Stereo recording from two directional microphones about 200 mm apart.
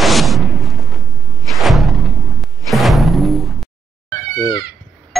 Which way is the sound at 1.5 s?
Centre (ahead or behind).